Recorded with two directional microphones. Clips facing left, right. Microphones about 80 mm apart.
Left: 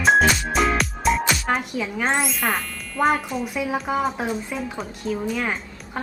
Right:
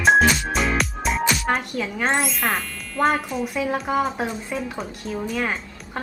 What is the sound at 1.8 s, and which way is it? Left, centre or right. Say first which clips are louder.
A woman's voice: even; centre.